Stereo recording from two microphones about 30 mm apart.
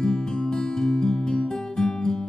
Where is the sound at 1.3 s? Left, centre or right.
Left.